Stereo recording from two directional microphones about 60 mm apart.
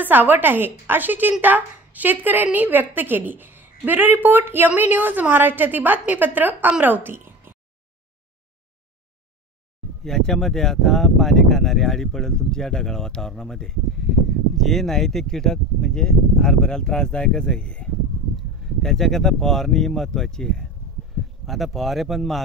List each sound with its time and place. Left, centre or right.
0.0 s a woman's voice: right
10.0 s speech: centre
18.6 s speech: centre
21.5 s speech: centre